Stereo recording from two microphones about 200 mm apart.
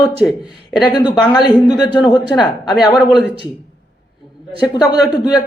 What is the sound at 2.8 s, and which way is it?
Speech, 5° right (ahead or behind).